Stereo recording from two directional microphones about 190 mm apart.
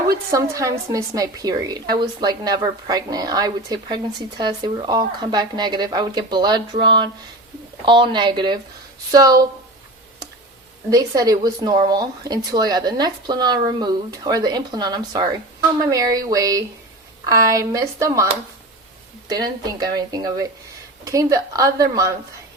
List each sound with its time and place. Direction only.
0.3 s a woman's voice: 15° right (ahead or behind)
10.8 s a woman's voice: 20° right (ahead or behind)
19.3 s a woman's voice: 20° right (ahead or behind)